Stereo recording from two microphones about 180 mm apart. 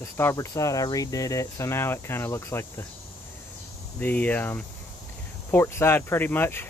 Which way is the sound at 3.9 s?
10° left (ahead or behind).